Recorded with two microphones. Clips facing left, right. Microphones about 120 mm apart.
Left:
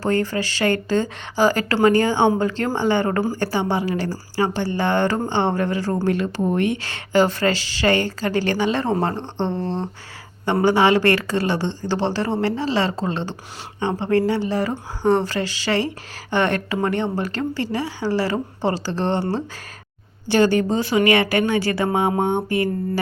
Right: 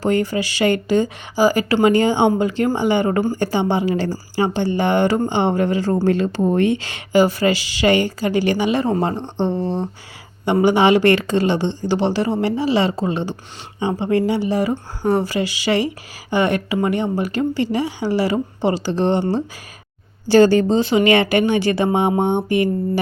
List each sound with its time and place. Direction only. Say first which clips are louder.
0.0 s a woman's voice: right 2 dB; 15° right (ahead or behind)
6.8 s a woman's voice: right 2 dB; 15° right (ahead or behind)
20.2 s speech: right 5 dB; 35° right (ahead or behind)